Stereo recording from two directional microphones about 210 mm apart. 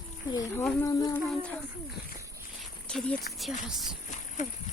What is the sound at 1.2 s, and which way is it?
Speech, 5° left (ahead or behind).